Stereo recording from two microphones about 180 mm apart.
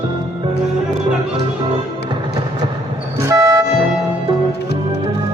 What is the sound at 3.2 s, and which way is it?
Vehicle, 15° right (ahead or behind).